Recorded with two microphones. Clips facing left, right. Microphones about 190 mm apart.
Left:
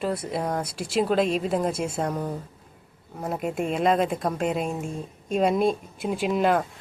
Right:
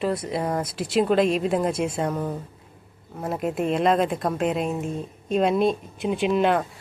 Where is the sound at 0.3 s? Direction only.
Centre (ahead or behind).